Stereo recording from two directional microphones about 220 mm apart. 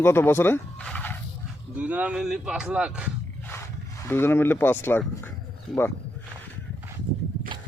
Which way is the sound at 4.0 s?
10° left (ahead or behind).